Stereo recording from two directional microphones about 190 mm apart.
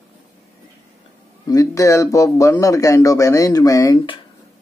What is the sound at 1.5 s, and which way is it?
A man's voice, 15° left (ahead or behind).